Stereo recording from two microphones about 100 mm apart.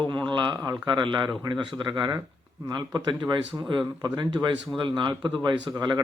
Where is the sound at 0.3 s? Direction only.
50° right (ahead or behind).